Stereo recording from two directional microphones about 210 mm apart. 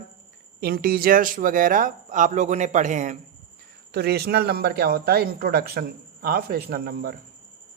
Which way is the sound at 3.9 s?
50° right (ahead or behind).